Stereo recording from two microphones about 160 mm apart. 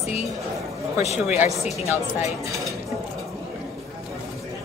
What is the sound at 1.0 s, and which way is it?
Speech, 45° left (ahead or behind).